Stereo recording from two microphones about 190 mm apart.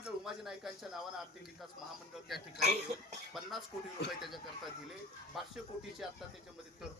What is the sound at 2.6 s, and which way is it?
Speech, 35° right (ahead or behind).